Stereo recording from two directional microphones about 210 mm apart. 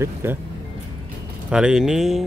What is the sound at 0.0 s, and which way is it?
Speech, 10° right (ahead or behind).